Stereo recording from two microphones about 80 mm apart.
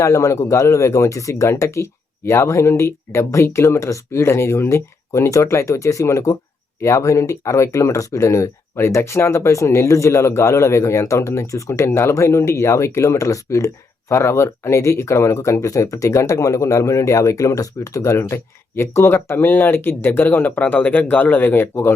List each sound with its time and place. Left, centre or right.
0.0 s speech: left